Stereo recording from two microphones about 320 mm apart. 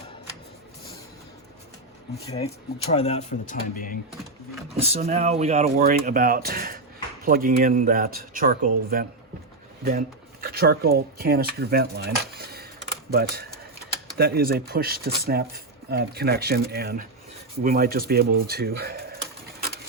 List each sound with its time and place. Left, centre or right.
2.2 s speech: centre
4.7 s speech: centre
10.4 s speech: right